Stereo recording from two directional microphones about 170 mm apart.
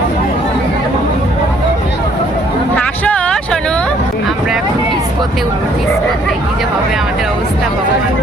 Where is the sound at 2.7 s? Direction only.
5° left (ahead or behind).